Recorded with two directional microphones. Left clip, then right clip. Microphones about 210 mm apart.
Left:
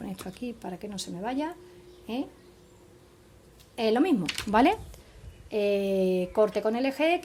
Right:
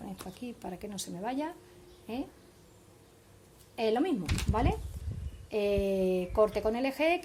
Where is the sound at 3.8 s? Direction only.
15° left (ahead or behind).